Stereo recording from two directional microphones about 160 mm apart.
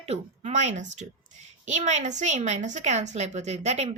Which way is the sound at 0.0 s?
40° right (ahead or behind).